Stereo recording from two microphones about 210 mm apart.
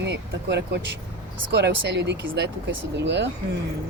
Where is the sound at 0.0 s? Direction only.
55° right (ahead or behind).